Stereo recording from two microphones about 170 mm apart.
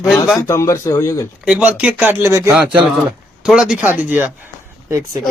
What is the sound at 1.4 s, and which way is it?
Speech, 5° right (ahead or behind).